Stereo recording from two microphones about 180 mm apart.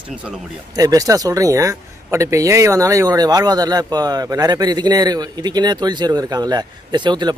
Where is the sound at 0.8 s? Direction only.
20° right (ahead or behind).